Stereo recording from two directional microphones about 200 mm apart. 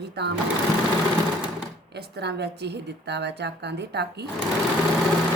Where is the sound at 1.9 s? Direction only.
55° right (ahead or behind).